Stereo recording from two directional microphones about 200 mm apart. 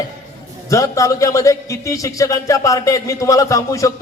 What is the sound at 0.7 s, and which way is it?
Speech, 15° left (ahead or behind).